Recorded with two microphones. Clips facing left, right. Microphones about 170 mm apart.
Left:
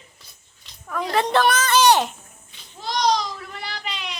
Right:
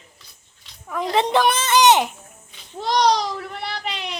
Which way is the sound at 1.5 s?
25° right (ahead or behind).